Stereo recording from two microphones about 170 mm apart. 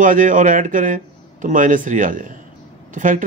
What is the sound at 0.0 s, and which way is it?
Speech, 50° right (ahead or behind).